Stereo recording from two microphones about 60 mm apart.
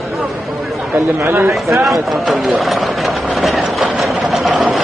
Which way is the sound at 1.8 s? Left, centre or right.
Centre.